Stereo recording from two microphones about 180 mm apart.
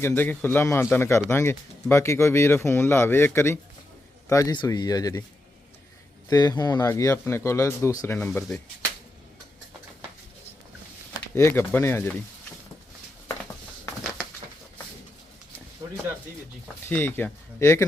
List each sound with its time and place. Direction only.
0.0 s speech: 10° left (ahead or behind)
6.3 s speech: 20° left (ahead or behind); by 8.6 s 5° left (ahead or behind)
11.3 s speech: 10° left (ahead or behind)
13.2 s a sound: 15° left (ahead or behind)
16.9 s speech: 10° left (ahead or behind)